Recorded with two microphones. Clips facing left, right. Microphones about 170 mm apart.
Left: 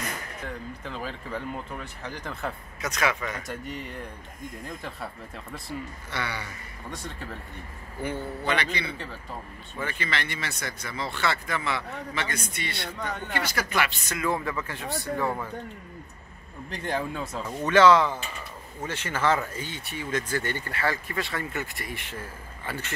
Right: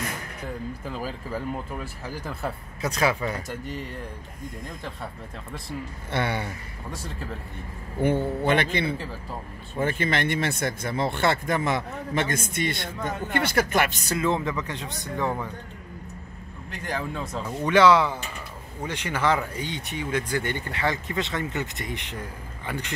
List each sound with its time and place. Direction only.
0.8 s speech: 5° right (ahead or behind)
2.8 s speech: 30° right (ahead or behind)
3.4 s speech: centre (ahead or behind)
6.1 s speech: 55° right (ahead or behind)
6.9 s speech: 5° right (ahead or behind)
8.0 s speech: 50° right (ahead or behind)
9.8 s speech: 50° right (ahead or behind)
14.1 s speech: 20° right (ahead or behind)
17.1 s speech: 5° left (ahead or behind)
17.6 s speech: 10° right (ahead or behind)